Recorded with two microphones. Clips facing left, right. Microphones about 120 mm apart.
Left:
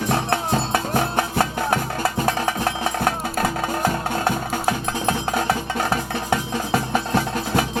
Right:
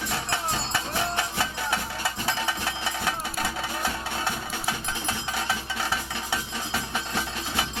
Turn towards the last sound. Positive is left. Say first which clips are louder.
# left 9 dB
turn(degrees=50)  # may be behind; listen again after turning